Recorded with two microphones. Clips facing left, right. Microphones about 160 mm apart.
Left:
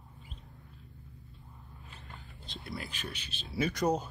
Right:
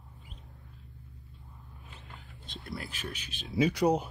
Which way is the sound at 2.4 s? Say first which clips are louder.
Right 1 dB; centre (ahead or behind).